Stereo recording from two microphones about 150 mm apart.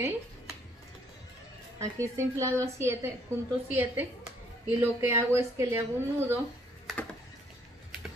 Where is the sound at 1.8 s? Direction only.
20° right (ahead or behind).